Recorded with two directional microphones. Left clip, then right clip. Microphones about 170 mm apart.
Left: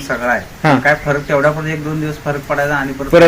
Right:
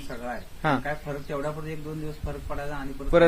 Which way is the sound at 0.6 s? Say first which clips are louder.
Left 10 dB; 10° right (ahead or behind).